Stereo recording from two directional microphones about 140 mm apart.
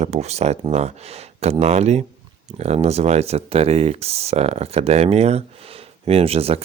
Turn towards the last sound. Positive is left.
turn(degrees=-45)  # may be behind; listen again after turning